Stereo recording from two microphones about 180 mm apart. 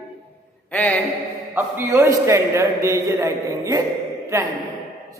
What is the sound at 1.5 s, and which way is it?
A man's voice, 10° right (ahead or behind).